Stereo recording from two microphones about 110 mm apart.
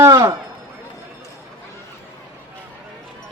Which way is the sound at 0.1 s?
30° right (ahead or behind).